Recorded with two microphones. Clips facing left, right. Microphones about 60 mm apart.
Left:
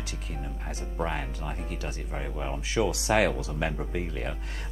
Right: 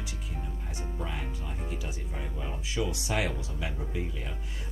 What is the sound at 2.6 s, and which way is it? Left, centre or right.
Speech, left.